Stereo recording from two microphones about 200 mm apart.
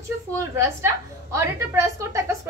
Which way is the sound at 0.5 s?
15° right (ahead or behind).